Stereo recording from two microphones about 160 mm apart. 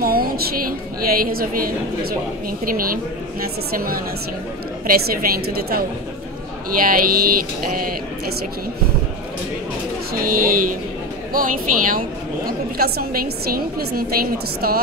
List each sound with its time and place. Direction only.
0.0 s a woman's voice: 70° right (ahead or behind)
10.2 s a woman's voice: 60° right (ahead or behind)
12.4 s a woman's voice: 75° right (ahead or behind)